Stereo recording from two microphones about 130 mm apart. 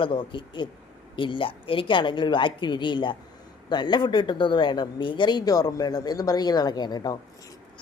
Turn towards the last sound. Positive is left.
turn(degrees=30)  # may be behind; listen again after turning